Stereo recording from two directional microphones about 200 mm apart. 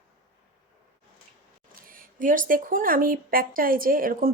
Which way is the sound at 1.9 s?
45° right (ahead or behind).